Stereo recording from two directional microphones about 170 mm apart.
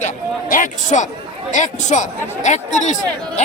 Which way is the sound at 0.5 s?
50° left (ahead or behind).